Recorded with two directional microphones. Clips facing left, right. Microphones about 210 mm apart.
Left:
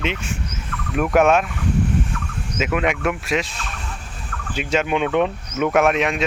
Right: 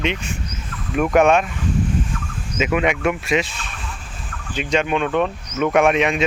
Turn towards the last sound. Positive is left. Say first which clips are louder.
# right 1 dB
turn(degrees=0)  # may be behind; listen again after turning